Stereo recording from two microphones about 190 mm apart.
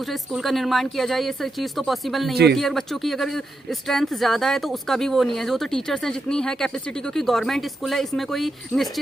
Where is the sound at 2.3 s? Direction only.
60° right (ahead or behind).